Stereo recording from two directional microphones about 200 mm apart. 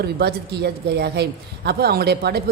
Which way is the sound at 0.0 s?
55° right (ahead or behind).